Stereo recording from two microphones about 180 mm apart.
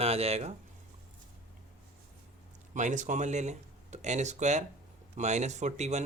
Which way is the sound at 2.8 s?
45° right (ahead or behind).